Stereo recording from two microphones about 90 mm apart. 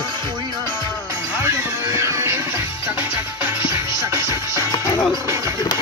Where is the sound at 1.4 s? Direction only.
30° right (ahead or behind).